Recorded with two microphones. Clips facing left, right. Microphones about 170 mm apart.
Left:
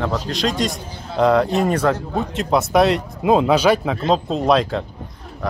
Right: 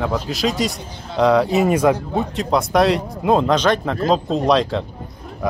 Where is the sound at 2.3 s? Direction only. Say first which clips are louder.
Left 2 dB; centre (ahead or behind).